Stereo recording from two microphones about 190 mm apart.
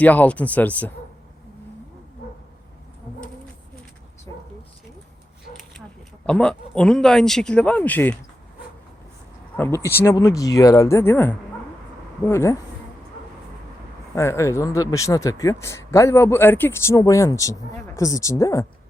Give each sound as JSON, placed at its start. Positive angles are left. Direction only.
{"t": 0.0, "sound": "speech", "side_deg": 10}
{"t": 6.2, "sound": "speech", "side_deg": 5}
{"t": 9.6, "sound": "speech", "side_deg": 15}
{"t": 14.2, "sound": "speech", "side_deg": 15}